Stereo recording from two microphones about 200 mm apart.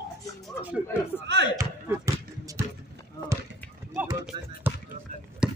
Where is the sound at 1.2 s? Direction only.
60° right (ahead or behind).